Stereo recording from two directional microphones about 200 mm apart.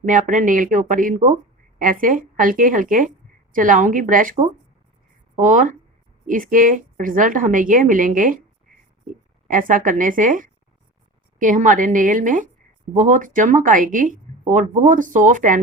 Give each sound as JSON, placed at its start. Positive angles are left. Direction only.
{"t": 0.0, "sound": "a woman's voice", "side_deg": -40}
{"t": 5.4, "sound": "speech", "side_deg": -40}
{"t": 8.7, "sound": "a sound", "side_deg": -40}
{"t": 9.0, "sound": "speech", "side_deg": -40}